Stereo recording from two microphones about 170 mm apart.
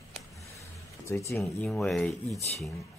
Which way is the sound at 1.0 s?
15° left (ahead or behind).